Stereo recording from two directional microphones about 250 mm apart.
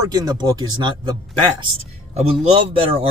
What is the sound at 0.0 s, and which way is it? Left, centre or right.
Speech, centre.